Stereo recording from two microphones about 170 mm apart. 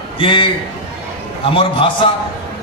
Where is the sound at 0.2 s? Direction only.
30° left (ahead or behind).